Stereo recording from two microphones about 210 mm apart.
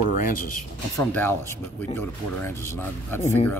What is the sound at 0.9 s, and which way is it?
Speech, 10° left (ahead or behind).